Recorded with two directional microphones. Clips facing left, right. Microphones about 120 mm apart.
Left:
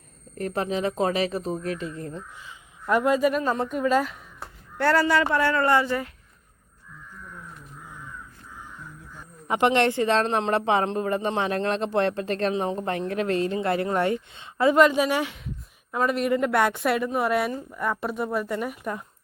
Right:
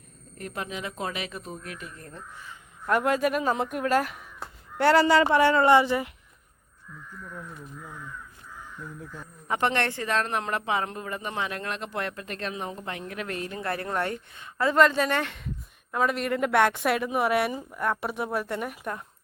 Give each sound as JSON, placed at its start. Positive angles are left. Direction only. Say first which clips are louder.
{"t": 0.3, "sound": "speech", "louder": "left 8 dB", "side_deg": 35}
{"t": 2.8, "sound": "a woman's voice", "louder": "left 3 dB", "side_deg": 0}
{"t": 4.8, "sound": "speech", "louder": "right 2 dB", "side_deg": -20}
{"t": 9.5, "sound": "speech", "louder": "left 5 dB", "side_deg": 15}
{"t": 14.8, "sound": "a woman's voice", "louder": "left 1 dB", "side_deg": 10}